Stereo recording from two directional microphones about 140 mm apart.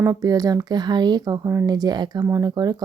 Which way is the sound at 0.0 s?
25° right (ahead or behind).